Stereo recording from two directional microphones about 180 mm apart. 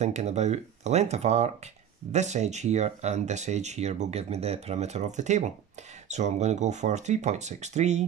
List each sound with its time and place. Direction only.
0.0 s speech: 40° right (ahead or behind)